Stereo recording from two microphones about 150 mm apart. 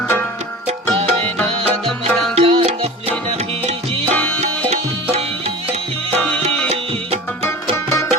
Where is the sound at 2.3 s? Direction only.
40° right (ahead or behind).